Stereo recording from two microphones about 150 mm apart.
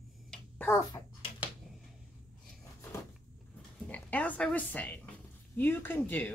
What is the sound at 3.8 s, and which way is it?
Speech, 10° left (ahead or behind).